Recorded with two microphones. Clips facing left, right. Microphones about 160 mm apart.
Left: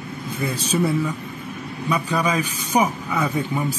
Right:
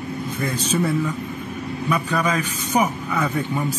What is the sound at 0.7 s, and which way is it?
Speech, 10° left (ahead or behind).